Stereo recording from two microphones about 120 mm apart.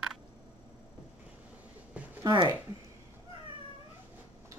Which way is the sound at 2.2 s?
35° right (ahead or behind).